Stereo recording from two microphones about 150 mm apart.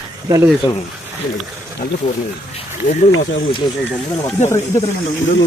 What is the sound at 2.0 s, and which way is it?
Speech, 35° left (ahead or behind).